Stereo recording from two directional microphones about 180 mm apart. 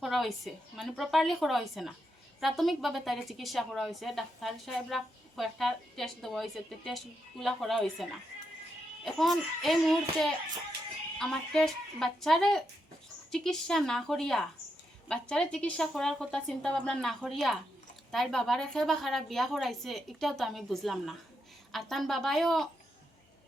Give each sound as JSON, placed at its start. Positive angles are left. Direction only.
{"t": 0.0, "sound": "a woman's voice", "side_deg": 0}
{"t": 9.0, "sound": "a woman's voice", "side_deg": 0}